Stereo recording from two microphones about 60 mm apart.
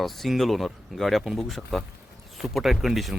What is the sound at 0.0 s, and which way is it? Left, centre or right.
Speech, centre.